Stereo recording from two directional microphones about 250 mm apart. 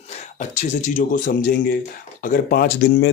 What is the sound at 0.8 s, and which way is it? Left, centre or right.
Speech, left.